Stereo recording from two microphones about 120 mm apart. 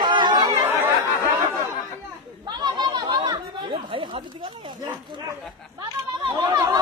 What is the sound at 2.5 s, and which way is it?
Chatter, 40° right (ahead or behind).